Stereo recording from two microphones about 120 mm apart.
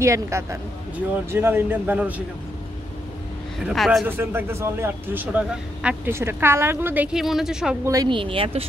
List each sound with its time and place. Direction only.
0.0 s a woman's voice: 25° right (ahead or behind)
3.6 s speech: centre (ahead or behind)
4.2 s a woman's voice: 20° right (ahead or behind)
7.1 s speech: 5° right (ahead or behind)
7.8 s a woman's voice: 30° right (ahead or behind)
8.1 s speech: 45° right (ahead or behind)